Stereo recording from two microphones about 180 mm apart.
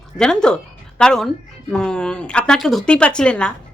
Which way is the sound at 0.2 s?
5° left (ahead or behind).